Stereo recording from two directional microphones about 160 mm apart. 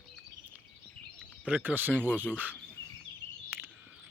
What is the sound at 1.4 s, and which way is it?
Speech, 10° right (ahead or behind).